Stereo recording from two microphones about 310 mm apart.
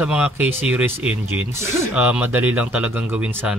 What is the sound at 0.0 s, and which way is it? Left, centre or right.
Speech, centre.